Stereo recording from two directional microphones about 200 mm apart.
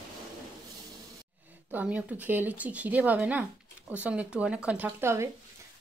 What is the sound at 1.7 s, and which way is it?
Speech, 5° right (ahead or behind).